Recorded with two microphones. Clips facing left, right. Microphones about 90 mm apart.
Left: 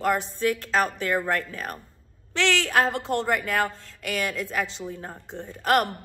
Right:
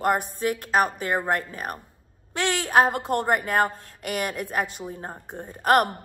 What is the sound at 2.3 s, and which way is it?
A woman's voice, 45° right (ahead or behind).